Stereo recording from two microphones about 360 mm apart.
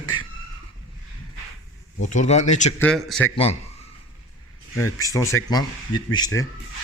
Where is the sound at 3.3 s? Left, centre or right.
Centre.